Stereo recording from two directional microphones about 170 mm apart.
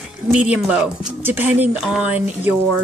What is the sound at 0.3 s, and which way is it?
Speech, 5° right (ahead or behind).